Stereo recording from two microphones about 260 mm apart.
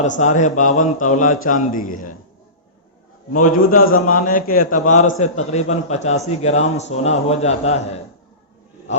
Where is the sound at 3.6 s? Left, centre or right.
Left.